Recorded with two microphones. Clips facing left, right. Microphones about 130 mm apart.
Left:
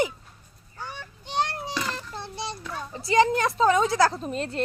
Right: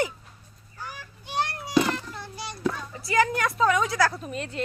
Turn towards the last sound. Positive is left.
turn(degrees=35)  # may be behind; listen again after turning